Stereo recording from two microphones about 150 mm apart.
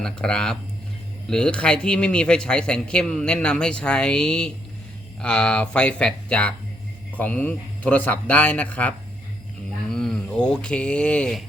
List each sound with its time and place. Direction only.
0.0 s a man's voice: 5° left (ahead or behind)